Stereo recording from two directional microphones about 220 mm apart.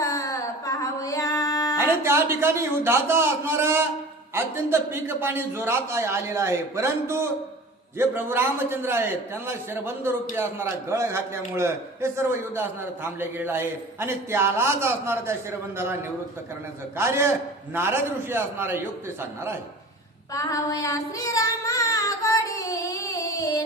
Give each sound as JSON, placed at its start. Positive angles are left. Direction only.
{"t": 0.0, "sound": "music", "side_deg": 15}
{"t": 2.0, "sound": "a man's voice", "side_deg": -10}
{"t": 17.0, "sound": "a man's voice", "side_deg": -10}
{"t": 20.3, "sound": "child singing", "side_deg": 15}